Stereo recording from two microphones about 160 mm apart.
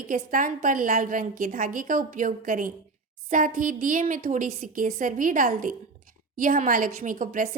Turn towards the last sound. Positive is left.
turn(degrees=-60)  # may be behind; listen again after turning